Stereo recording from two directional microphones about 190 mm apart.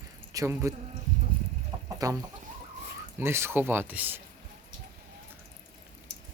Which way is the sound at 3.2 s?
15° right (ahead or behind).